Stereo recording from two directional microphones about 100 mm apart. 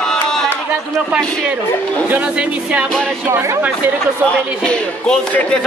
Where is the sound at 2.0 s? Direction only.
15° right (ahead or behind).